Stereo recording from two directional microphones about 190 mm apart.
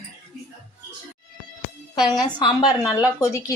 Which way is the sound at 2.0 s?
20° left (ahead or behind).